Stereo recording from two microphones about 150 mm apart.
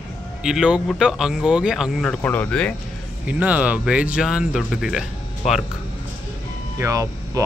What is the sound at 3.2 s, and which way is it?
Speech, 10° right (ahead or behind).